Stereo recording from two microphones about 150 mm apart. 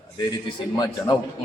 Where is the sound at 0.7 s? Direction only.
25° left (ahead or behind).